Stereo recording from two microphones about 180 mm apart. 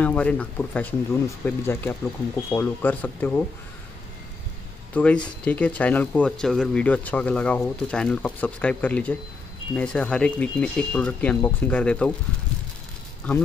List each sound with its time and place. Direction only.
0.0 s speech: 5° left (ahead or behind)
4.9 s speech: 5° left (ahead or behind)